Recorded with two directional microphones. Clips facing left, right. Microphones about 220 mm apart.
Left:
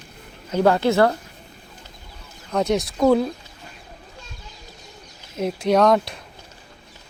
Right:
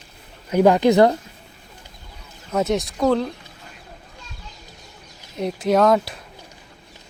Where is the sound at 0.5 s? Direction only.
15° right (ahead or behind).